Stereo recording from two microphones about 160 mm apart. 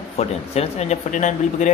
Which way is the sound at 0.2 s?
40° left (ahead or behind).